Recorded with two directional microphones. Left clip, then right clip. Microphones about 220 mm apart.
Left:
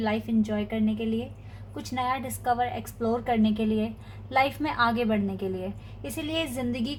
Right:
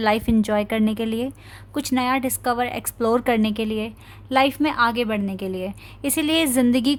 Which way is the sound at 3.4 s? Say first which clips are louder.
Right 3 dB; 35° right (ahead or behind).